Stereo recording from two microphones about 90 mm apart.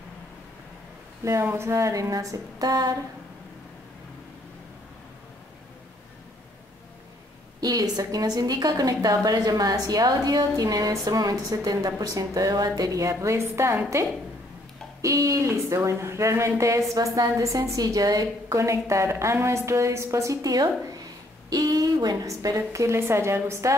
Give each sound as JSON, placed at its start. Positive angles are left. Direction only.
{"t": 1.2, "sound": "a woman's voice", "side_deg": -30}
{"t": 7.6, "sound": "a woman's voice", "side_deg": -45}